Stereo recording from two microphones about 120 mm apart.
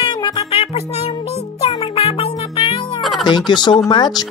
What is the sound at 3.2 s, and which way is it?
Speech, 40° left (ahead or behind).